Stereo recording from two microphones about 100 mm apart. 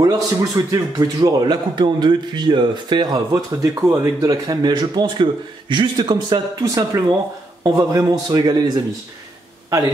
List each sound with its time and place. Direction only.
0.0 s a man's voice: 35° right (ahead or behind)
6.6 s a man's voice: 35° right (ahead or behind)